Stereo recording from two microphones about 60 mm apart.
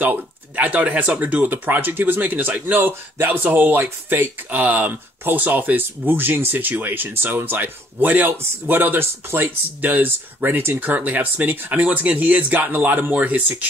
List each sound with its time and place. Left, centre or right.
0.0 s speech: right